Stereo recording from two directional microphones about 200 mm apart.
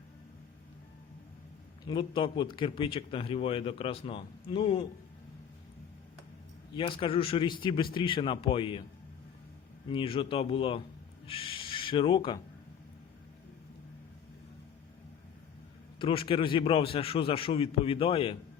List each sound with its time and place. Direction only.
1.8 s a man's voice: 25° left (ahead or behind)
6.7 s a man's voice: 25° left (ahead or behind)
9.9 s a man's voice: 25° left (ahead or behind)
16.0 s a man's voice: 25° left (ahead or behind)